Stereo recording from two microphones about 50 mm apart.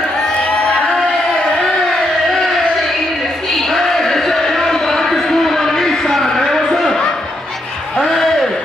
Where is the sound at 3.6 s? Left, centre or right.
Centre.